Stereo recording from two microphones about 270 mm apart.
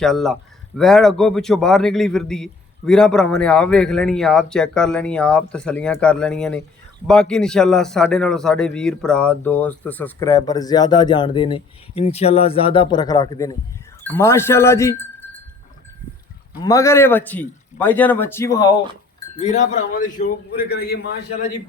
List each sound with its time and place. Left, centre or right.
0.0 s a man's voice: centre
16.6 s a man's voice: centre
19.4 s a man's voice: left